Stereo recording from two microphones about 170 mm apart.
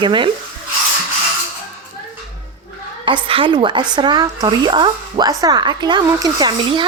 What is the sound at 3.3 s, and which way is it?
A woman's voice, 30° right (ahead or behind).